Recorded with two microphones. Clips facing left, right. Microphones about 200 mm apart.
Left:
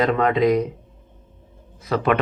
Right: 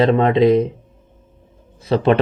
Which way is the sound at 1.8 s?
30° right (ahead or behind).